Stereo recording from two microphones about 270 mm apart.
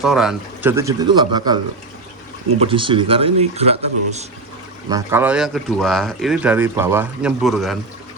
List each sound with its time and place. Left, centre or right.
0.0 s speech: centre
2.6 s speech: centre
4.9 s speech: centre